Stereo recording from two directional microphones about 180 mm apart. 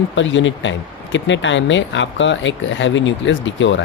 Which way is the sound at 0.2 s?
90° left.